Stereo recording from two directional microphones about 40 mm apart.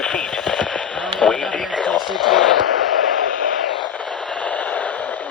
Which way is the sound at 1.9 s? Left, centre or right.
Centre.